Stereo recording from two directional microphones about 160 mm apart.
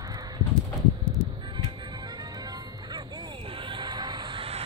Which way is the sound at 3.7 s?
30° right (ahead or behind).